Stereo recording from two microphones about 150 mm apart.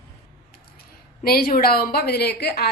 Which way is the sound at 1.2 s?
90° left.